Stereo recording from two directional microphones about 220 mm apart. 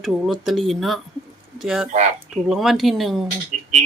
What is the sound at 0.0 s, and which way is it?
Speech, centre (ahead or behind).